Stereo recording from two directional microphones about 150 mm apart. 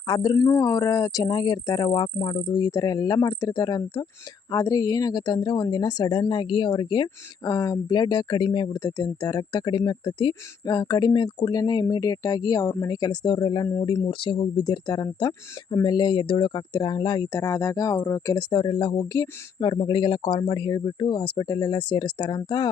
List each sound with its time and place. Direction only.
0.1 s a woman's voice: 25° left (ahead or behind)